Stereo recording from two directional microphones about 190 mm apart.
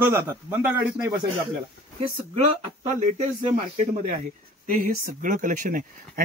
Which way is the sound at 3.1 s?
35° right (ahead or behind).